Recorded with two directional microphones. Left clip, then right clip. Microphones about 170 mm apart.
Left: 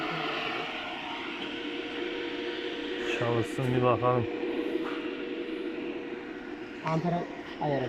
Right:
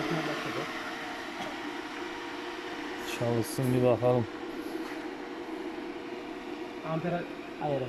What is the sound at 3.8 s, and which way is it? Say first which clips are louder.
Speech: even; 20° right (ahead or behind).